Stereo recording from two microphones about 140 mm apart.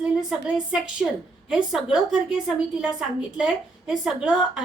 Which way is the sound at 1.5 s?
5° right (ahead or behind).